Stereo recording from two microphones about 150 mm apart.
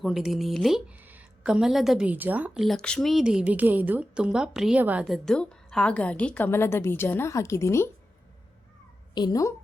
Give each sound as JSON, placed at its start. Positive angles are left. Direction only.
{"t": 0.0, "sound": "a woman's voice", "side_deg": 0}
{"t": 5.0, "sound": "a woman's voice", "side_deg": 0}
{"t": 9.1, "sound": "a woman's voice", "side_deg": 25}